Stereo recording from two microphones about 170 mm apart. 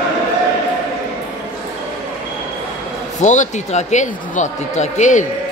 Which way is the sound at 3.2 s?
45° left (ahead or behind).